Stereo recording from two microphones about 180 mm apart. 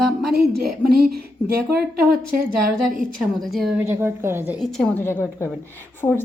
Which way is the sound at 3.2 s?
Centre (ahead or behind).